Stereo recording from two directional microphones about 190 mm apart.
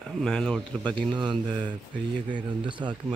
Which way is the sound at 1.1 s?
25° right (ahead or behind).